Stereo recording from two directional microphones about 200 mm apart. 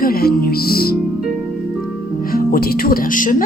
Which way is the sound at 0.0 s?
50° left (ahead or behind).